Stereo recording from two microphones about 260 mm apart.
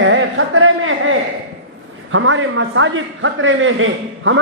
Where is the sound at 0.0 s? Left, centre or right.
Right.